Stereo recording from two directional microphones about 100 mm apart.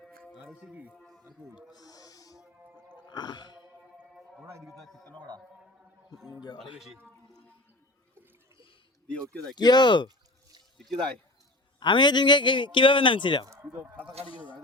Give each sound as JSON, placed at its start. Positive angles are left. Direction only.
{"t": 0.0, "sound": "music", "side_deg": 10}
{"t": 0.3, "sound": "speech", "side_deg": -10}
{"t": 0.9, "sound": "a sound", "side_deg": 0}
{"t": 1.7, "sound": "music", "side_deg": 40}
{"t": 2.6, "sound": "music", "side_deg": -20}
{"t": 3.1, "sound": "a sound", "side_deg": 45}
{"t": 4.4, "sound": "a man's voice", "side_deg": -25}
{"t": 4.7, "sound": "a man's voice", "side_deg": 5}
{"t": 5.1, "sound": "speech", "side_deg": -50}
{"t": 6.7, "sound": "a man's voice", "side_deg": -5}
{"t": 9.6, "sound": "a man's voice", "side_deg": 45}
{"t": 10.8, "sound": "speech", "side_deg": 0}
{"t": 11.8, "sound": "a man's voice", "side_deg": 50}